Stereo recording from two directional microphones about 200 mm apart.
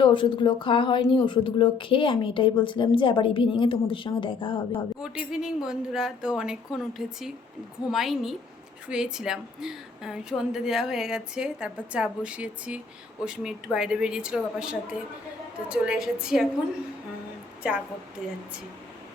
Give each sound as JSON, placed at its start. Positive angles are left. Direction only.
{"t": 0.0, "sound": "speech", "side_deg": 25}
{"t": 5.0, "sound": "a woman's voice", "side_deg": -5}
{"t": 17.6, "sound": "a woman's voice", "side_deg": -5}